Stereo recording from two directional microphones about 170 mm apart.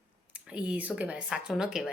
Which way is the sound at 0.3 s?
5° right (ahead or behind).